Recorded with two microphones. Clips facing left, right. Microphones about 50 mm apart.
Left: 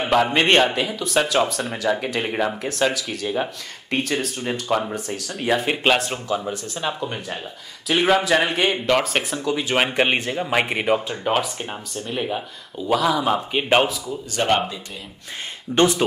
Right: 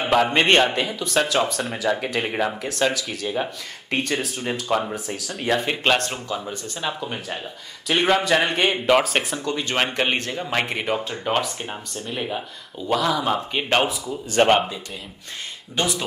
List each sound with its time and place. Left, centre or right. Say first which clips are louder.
0.0 s a man's voice: even; centre
14.5 s a man's voice: right 2 dB; centre
15.7 s speech: left 7 dB; left